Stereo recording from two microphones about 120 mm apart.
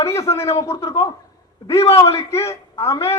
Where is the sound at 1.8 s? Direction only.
55° left (ahead or behind).